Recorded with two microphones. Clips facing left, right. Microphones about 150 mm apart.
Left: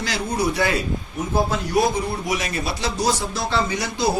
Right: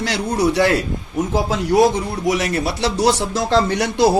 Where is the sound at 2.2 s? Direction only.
80° right.